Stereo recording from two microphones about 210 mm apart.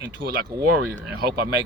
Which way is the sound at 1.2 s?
50° right (ahead or behind).